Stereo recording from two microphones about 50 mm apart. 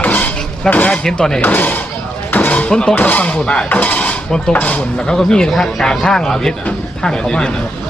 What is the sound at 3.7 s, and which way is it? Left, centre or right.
Speech, left.